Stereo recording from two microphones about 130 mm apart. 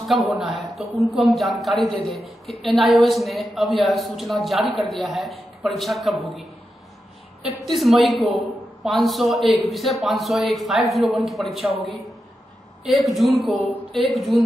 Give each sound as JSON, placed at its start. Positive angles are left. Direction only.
{"t": 0.3, "sound": "a woman's voice", "side_deg": 0}